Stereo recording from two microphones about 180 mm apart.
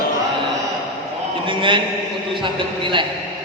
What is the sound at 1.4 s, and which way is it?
A man's voice, 25° right (ahead or behind).